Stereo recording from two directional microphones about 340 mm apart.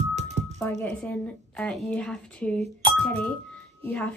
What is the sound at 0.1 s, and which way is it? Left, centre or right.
Music, centre.